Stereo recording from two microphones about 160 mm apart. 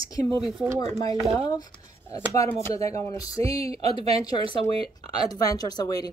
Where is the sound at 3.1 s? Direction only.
20° left (ahead or behind).